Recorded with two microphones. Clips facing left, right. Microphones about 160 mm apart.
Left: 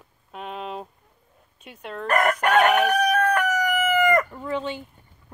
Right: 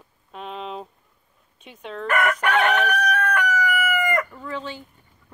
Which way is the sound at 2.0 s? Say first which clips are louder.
Left 1 dB; 40° left (ahead or behind).